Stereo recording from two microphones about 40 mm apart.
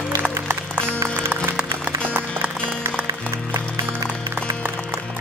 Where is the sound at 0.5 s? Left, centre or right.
Right.